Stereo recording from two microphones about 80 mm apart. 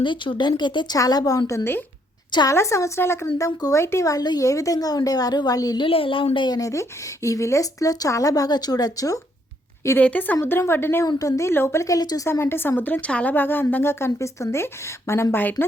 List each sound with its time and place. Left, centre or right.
0.0 s speech: left
0.9 s a woman's voice: left
5.8 s a woman's voice: left
6.6 s speech: left
10.0 s a woman's voice: centre
10.4 s a woman's voice: left
11.2 s a woman's voice: left
11.9 s speech: left
12.2 s a woman's voice: left